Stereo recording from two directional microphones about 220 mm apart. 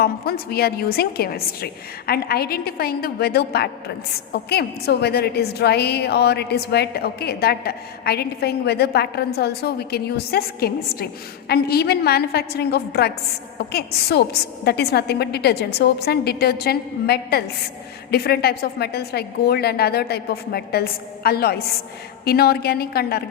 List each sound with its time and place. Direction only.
0.0 s a woman's voice: 45° left (ahead or behind)